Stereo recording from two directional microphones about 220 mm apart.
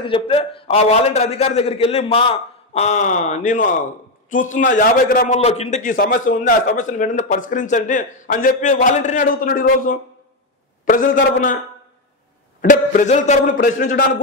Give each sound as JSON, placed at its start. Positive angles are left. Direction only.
{"t": 0.0, "sound": "a man's voice", "side_deg": 25}
{"t": 12.6, "sound": "a man's voice", "side_deg": 35}